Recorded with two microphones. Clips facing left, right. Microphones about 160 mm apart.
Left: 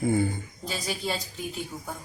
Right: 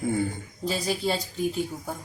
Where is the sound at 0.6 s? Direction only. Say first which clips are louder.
Right 5 dB; 30° right (ahead or behind).